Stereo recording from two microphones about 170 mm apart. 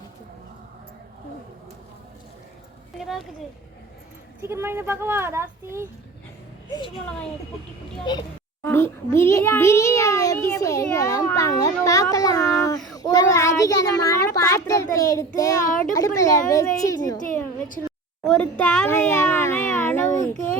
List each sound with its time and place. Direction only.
3.0 s a sound: centre (ahead or behind)
4.4 s speech: 15° right (ahead or behind)
6.7 s a child's voice: 25° left (ahead or behind)
8.1 s a child's voice: 25° left (ahead or behind)
8.6 s a child's voice: 15° left (ahead or behind)
18.2 s a child's voice: 5° left (ahead or behind)